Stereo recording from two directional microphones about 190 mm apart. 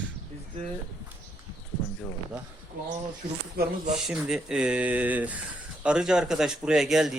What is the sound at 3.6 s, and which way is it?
Speech, 55° right (ahead or behind).